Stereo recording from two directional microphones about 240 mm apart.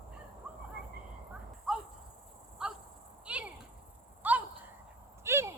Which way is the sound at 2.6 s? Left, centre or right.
Centre.